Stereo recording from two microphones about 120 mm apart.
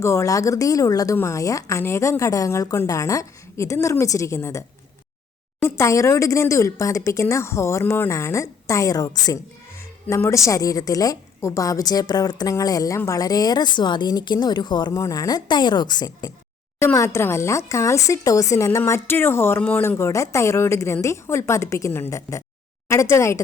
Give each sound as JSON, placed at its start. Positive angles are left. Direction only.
{"t": 0.0, "sound": "speech", "side_deg": 25}
{"t": 5.6, "sound": "speech", "side_deg": 25}
{"t": 15.0, "sound": "speech", "side_deg": 25}
{"t": 16.8, "sound": "speech", "side_deg": 25}